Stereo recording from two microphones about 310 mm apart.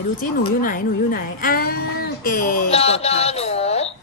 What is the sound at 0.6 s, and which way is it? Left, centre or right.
A woman's voice, left.